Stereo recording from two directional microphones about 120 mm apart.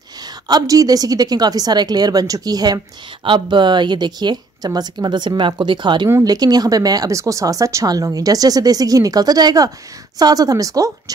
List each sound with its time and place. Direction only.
0.5 s speech: 30° right (ahead or behind)
6.0 s speech: 25° right (ahead or behind)